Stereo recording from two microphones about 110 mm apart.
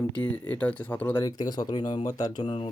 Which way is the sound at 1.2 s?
35° left (ahead or behind).